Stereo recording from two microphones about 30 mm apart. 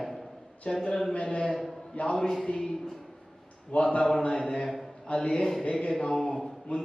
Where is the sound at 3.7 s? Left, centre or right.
Left.